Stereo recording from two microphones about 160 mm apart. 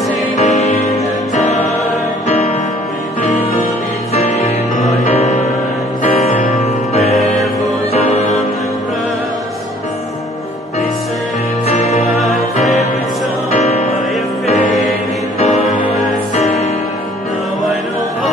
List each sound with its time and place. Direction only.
0.4 s music: 45° left (ahead or behind)
4.1 s music: 45° left (ahead or behind)
11.7 s music: 45° left (ahead or behind)
14.4 s music: 45° left (ahead or behind)